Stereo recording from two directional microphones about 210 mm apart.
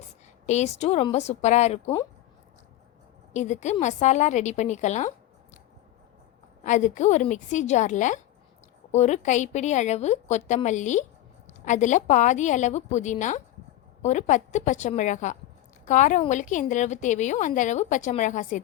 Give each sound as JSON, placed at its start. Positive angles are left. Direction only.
{"t": 0.4, "sound": "a woman's voice", "side_deg": 30}
{"t": 3.3, "sound": "a woman's voice", "side_deg": 35}
{"t": 6.6, "sound": "a woman's voice", "side_deg": 35}